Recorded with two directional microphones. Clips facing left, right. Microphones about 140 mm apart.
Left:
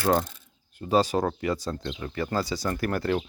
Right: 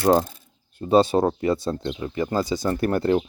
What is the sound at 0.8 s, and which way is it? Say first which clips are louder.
Speech: right 5 dB; 25° right (ahead or behind).